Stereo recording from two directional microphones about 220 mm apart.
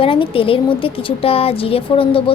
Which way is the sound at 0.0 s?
25° left (ahead or behind).